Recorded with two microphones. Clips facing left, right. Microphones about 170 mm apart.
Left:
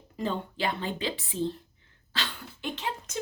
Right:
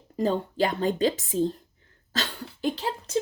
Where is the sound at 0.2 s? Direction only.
40° right (ahead or behind).